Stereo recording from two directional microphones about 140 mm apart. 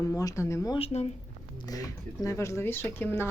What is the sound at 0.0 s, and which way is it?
Speech, 25° left (ahead or behind).